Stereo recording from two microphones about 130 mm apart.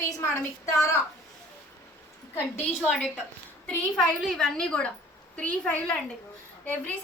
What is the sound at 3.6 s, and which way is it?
A woman's voice, centre (ahead or behind).